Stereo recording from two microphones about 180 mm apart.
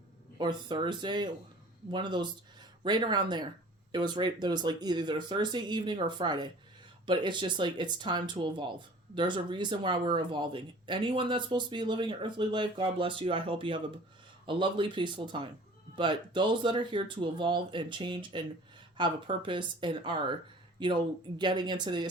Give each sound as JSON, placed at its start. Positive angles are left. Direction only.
{"t": 0.3, "sound": "speech", "side_deg": -25}